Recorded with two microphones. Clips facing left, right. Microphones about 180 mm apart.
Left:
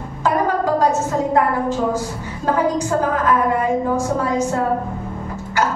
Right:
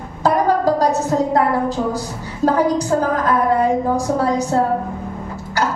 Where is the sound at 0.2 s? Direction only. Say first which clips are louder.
Right 3 dB; 35° right (ahead or behind).